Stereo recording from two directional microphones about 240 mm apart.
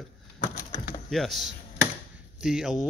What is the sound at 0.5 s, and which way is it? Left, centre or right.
Wood, left.